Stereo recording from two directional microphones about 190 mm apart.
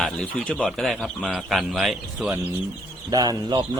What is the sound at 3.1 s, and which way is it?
Speech, 20° right (ahead or behind).